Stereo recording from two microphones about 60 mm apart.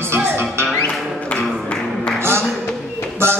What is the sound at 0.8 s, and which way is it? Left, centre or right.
Music, centre.